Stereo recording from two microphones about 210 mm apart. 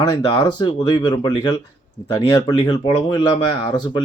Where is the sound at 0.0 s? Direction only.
20° left (ahead or behind).